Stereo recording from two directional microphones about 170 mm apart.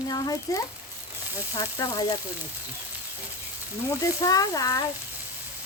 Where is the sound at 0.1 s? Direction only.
20° left (ahead or behind).